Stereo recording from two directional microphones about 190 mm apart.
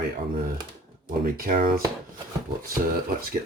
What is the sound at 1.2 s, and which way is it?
Speech, 50° right (ahead or behind).